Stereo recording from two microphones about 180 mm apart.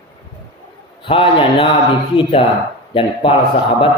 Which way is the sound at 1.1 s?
30° left (ahead or behind).